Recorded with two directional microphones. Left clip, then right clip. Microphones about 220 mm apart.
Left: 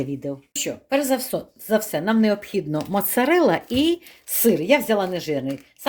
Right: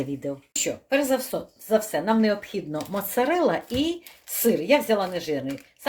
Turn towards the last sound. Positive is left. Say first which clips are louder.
# left 4 dB
turn(degrees=35)  # may be behind; listen again after turning